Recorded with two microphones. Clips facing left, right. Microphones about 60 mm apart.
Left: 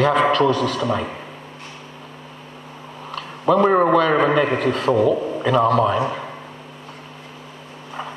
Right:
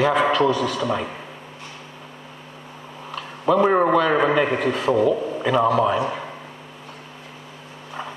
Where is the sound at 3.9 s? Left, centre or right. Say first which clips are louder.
Left 2 dB; left.